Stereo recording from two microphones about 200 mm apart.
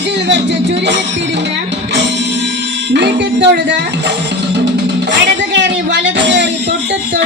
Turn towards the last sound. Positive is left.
turn(degrees=-60)  # may be behind; listen again after turning